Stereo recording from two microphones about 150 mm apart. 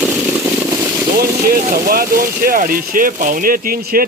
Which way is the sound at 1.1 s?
75° right (ahead or behind).